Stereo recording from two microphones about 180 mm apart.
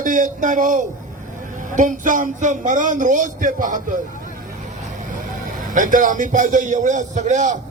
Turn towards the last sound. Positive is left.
turn(degrees=-40)  # may be behind; listen again after turning